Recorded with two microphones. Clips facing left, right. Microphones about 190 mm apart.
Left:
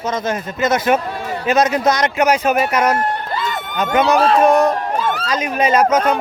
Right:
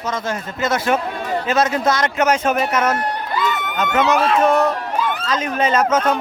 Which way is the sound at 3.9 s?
35° left (ahead or behind).